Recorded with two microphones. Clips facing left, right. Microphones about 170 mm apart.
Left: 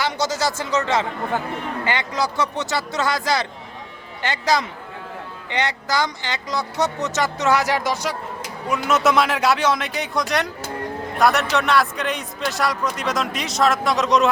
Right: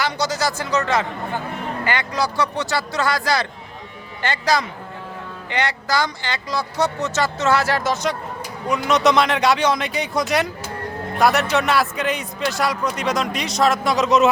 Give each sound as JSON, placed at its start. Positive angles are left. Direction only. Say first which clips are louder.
{"t": 0.0, "sound": "speech", "louder": "even", "side_deg": 25}